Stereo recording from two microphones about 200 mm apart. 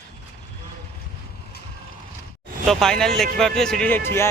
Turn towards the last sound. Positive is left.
turn(degrees=10)  # may be behind; listen again after turning